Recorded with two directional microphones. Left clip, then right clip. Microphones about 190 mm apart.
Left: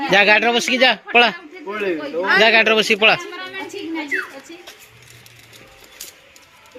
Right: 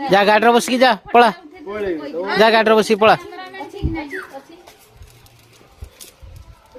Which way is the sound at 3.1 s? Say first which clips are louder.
Left 2 dB; 15° right (ahead or behind).